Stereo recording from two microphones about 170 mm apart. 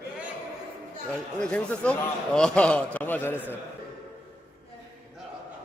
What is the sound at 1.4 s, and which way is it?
A man's voice, 5° left (ahead or behind).